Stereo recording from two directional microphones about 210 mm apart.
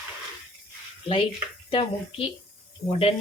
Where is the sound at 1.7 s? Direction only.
25° left (ahead or behind).